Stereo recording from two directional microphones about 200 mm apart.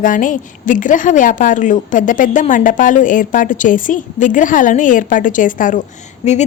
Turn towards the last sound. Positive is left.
turn(degrees=35)  # may be behind; listen again after turning